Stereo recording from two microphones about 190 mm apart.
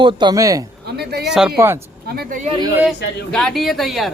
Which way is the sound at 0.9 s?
60° right (ahead or behind).